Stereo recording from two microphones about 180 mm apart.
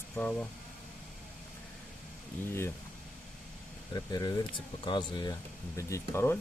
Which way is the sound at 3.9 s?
20° left (ahead or behind).